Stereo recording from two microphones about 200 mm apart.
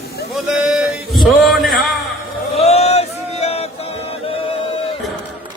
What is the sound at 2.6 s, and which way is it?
Male singing, 30° left (ahead or behind).